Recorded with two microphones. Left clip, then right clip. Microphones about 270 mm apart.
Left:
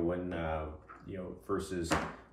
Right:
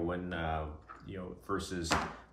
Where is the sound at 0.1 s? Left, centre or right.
Centre.